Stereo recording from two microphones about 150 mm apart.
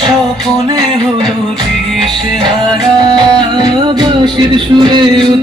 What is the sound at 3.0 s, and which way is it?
Music, 30° right (ahead or behind).